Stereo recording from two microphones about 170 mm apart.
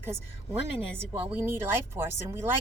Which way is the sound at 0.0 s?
15° right (ahead or behind).